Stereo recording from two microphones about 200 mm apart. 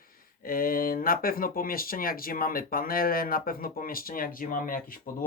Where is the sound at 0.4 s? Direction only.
45° left (ahead or behind).